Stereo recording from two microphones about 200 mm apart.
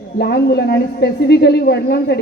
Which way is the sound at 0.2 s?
55° left (ahead or behind).